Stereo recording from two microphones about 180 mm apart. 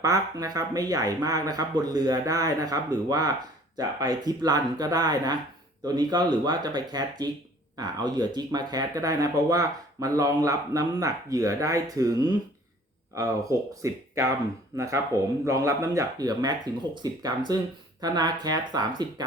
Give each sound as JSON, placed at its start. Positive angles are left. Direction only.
{"t": 0.0, "sound": "speech", "side_deg": -20}
{"t": 13.1, "sound": "speech", "side_deg": -20}